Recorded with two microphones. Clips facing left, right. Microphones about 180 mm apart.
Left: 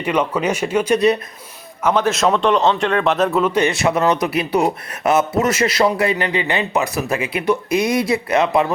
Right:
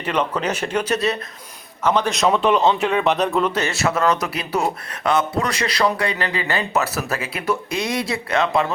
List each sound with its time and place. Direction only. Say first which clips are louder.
0.0 s a man's voice: left 3 dB; 10° left (ahead or behind)
3.5 s speech: left 5 dB; 15° left (ahead or behind)